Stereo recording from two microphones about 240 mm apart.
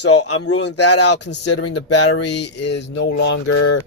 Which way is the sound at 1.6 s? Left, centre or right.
Left.